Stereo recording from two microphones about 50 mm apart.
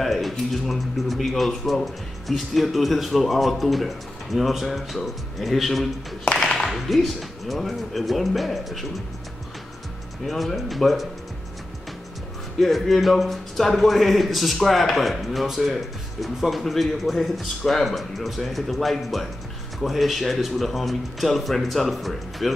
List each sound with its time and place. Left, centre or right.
0.0 s speech: centre
10.2 s speech: centre
12.5 s speech: centre